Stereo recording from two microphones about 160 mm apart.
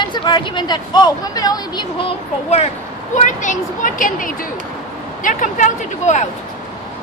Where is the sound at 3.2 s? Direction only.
50° left (ahead or behind).